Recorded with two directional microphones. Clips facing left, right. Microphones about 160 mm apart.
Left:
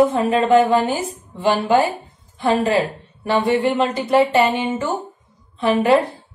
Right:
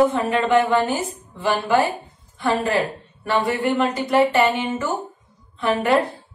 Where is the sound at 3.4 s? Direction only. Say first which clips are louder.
Left 3 dB; 25° left (ahead or behind).